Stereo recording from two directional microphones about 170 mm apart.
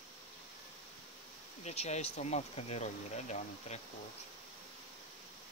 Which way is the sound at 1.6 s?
40° left (ahead or behind).